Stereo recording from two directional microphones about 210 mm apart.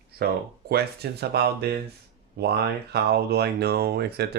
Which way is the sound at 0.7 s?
50° right (ahead or behind).